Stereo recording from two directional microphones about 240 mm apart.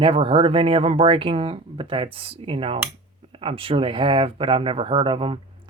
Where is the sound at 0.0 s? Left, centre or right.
Right.